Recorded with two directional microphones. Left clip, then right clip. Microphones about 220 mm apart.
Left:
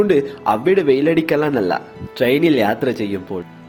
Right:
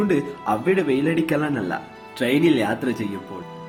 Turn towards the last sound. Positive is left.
turn(degrees=30)  # may be behind; listen again after turning